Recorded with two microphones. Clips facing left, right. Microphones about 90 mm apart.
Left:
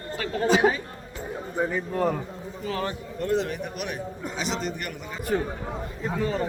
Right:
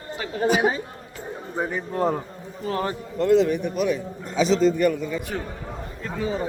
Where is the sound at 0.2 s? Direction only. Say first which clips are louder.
Even; 15° right (ahead or behind).